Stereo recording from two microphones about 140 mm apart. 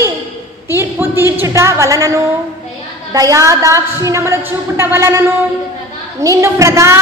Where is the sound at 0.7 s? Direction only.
15° right (ahead or behind).